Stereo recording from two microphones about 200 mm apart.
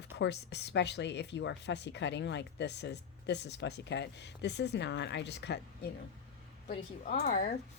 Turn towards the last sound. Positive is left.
turn(degrees=45)  # may be behind; listen again after turning